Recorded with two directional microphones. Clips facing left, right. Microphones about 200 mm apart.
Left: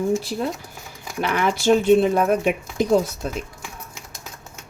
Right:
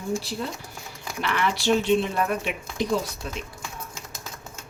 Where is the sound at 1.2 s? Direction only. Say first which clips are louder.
Left 5 dB; 45° left (ahead or behind).